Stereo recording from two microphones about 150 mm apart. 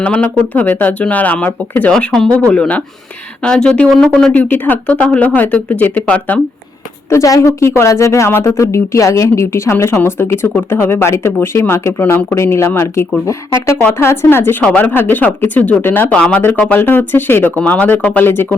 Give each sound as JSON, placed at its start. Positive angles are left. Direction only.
{"t": 0.0, "sound": "a woman's voice", "side_deg": 10}